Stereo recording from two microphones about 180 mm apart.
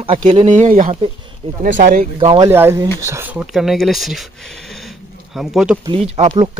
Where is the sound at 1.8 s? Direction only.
50° right (ahead or behind).